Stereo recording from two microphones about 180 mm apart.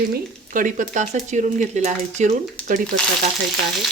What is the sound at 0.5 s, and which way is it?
Speech, 45° right (ahead or behind).